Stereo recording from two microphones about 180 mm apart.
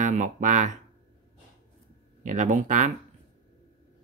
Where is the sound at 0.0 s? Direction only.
45° right (ahead or behind).